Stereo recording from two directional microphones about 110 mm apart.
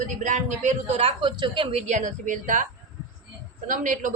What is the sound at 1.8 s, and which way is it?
Speech, 90° right.